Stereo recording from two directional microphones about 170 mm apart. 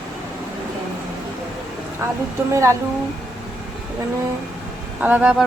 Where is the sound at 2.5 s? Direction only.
15° right (ahead or behind).